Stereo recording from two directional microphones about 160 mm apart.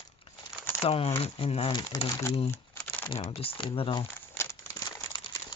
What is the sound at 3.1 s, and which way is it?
Speech, 35° left (ahead or behind).